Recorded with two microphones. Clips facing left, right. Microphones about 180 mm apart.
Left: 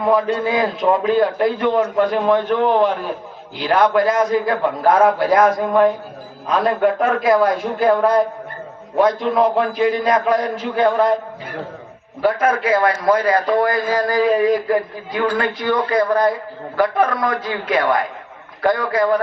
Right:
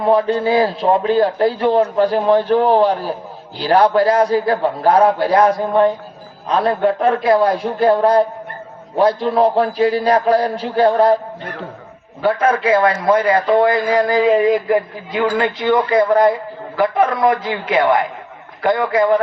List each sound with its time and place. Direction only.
0.1 s a man's voice: 30° right (ahead or behind)
12.2 s a man's voice: 30° right (ahead or behind)